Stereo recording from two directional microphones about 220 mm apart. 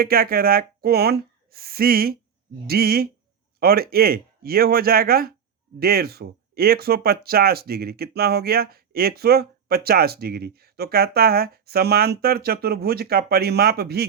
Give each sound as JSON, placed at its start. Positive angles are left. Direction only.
{"t": 0.0, "sound": "speech", "side_deg": -45}